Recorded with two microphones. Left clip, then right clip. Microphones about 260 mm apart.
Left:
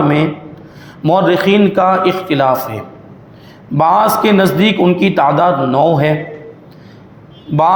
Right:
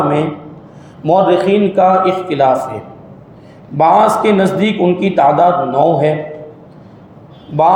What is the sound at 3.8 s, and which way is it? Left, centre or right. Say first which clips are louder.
A man's voice: right 1 dB; left.